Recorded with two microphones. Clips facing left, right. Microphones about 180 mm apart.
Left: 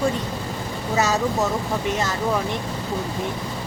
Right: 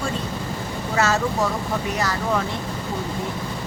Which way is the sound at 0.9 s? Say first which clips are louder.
Even; 15° left (ahead or behind).